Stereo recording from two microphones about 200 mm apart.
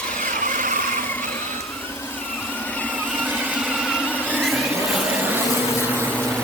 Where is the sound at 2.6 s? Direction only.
5° left (ahead or behind).